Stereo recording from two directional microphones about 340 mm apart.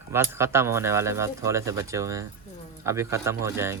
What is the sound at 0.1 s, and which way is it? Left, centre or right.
Speech, centre.